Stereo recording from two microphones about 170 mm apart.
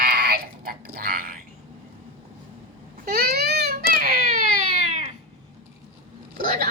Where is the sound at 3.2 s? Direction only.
70° right (ahead or behind); by 5.1 s 45° right (ahead or behind).